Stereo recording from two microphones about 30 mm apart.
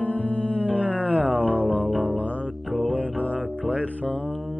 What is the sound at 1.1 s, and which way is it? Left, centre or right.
Music, right.